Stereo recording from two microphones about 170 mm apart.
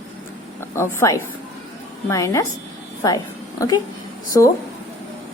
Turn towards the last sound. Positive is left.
turn(degrees=20)  # may be behind; listen again after turning